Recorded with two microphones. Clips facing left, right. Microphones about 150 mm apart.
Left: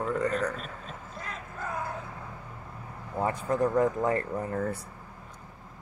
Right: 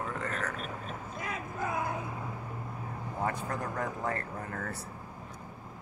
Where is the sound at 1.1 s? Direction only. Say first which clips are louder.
Right 3 dB; 10° right (ahead or behind).